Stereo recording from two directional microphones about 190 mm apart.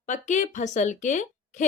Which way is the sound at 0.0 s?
40° left (ahead or behind).